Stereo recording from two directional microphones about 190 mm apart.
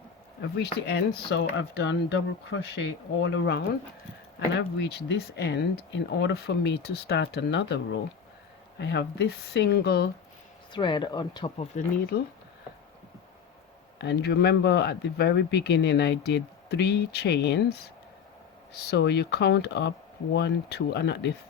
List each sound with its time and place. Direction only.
0.6 s speech: 60° left (ahead or behind)
8.8 s speech: 65° left (ahead or behind)
10.7 s speech: 25° left (ahead or behind)
11.7 s speech: 35° left (ahead or behind)
12.1 s speech: 55° left (ahead or behind)
14.0 s speech: 60° left (ahead or behind)